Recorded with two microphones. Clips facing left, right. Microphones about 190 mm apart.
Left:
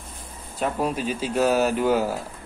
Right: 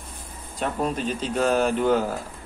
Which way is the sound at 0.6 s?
5° left (ahead or behind).